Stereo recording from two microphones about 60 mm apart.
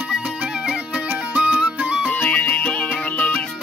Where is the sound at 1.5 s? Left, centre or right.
Right.